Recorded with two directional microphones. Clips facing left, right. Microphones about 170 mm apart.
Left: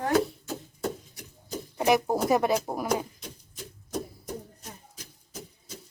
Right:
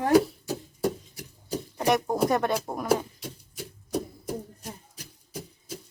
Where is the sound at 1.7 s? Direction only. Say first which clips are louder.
Left 1 dB; 5° left (ahead or behind).